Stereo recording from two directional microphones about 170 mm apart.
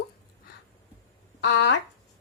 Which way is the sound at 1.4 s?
90° left.